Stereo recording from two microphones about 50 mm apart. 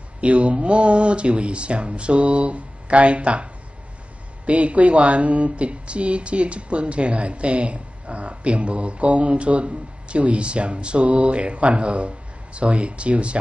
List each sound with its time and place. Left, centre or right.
0.2 s a woman's voice: right
4.5 s a woman's voice: right